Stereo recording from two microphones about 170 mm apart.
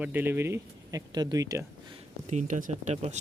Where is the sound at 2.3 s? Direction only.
45° right (ahead or behind).